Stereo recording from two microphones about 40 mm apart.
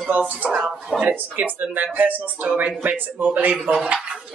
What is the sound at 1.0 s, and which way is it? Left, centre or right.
Speech, right.